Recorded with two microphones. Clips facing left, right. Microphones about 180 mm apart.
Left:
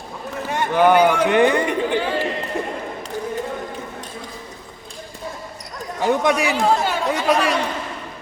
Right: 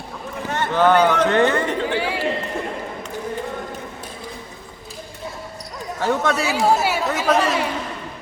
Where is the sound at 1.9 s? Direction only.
10° right (ahead or behind).